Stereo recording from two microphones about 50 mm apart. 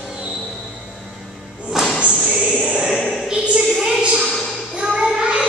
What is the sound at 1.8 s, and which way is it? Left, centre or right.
Music, centre.